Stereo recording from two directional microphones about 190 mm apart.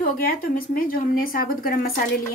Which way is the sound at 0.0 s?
50° left (ahead or behind).